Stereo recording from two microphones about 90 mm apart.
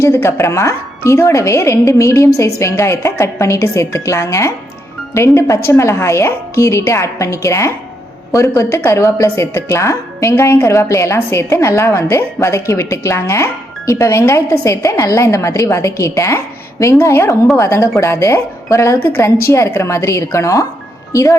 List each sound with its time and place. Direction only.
0.0 s a woman's voice: 30° left (ahead or behind)